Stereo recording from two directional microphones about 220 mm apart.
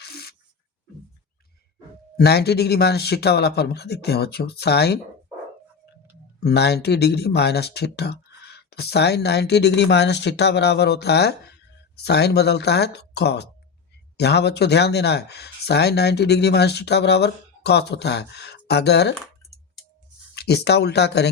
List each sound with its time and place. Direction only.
0.0 s a sound: 45° left (ahead or behind)
2.1 s speech: 45° left (ahead or behind)
6.4 s speech: 50° left (ahead or behind)
20.3 s speech: 45° left (ahead or behind)